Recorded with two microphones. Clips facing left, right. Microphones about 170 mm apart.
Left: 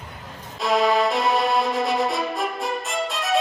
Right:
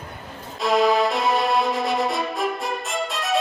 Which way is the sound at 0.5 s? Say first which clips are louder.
Right 1 dB; centre (ahead or behind).